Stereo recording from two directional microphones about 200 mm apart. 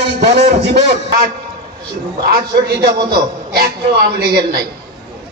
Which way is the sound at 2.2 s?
50° right (ahead or behind).